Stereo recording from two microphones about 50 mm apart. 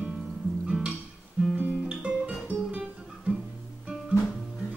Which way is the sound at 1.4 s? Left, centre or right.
Right.